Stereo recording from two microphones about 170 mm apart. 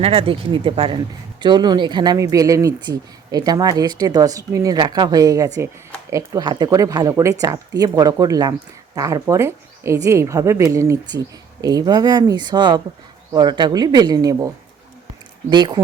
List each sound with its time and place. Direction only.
0.0 s speech: 35° right (ahead or behind)